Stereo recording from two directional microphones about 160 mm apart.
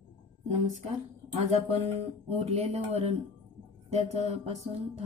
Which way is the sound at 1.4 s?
40° right (ahead or behind).